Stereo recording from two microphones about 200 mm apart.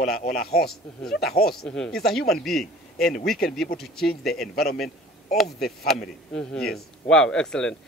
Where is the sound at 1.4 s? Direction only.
Centre (ahead or behind).